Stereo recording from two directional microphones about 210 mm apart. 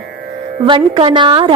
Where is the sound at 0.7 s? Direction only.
25° right (ahead or behind).